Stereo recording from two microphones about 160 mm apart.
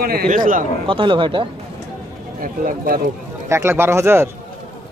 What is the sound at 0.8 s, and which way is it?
Speech, 30° right (ahead or behind).